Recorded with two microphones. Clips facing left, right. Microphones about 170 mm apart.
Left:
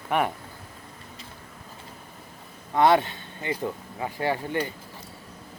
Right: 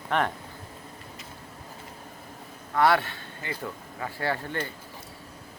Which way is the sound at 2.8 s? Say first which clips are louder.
Left 3 dB; 20° left (ahead or behind).